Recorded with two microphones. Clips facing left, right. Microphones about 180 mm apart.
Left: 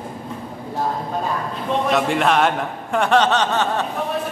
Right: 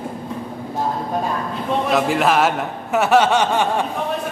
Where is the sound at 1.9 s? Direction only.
Centre (ahead or behind).